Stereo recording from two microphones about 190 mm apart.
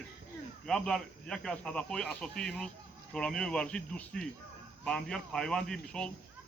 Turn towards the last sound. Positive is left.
turn(degrees=5)  # may be behind; listen again after turning